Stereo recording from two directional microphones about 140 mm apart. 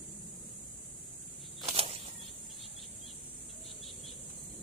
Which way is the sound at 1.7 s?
40° right (ahead or behind).